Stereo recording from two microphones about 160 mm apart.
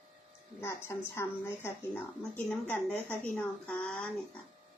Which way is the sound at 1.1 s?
15° left (ahead or behind).